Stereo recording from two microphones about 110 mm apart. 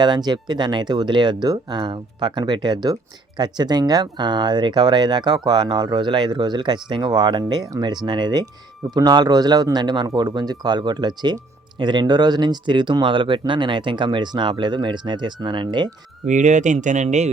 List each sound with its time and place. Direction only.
0.0 s speech: 40° right (ahead or behind)
16.3 s speech: 90° right